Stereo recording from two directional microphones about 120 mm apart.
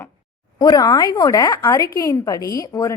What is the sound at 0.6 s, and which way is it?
A woman's voice, 35° left (ahead or behind).